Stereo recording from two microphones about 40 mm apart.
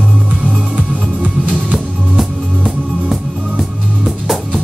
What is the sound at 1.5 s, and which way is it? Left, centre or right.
Music, centre.